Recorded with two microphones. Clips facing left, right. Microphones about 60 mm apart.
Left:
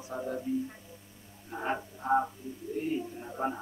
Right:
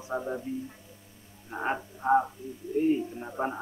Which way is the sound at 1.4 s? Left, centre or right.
Centre.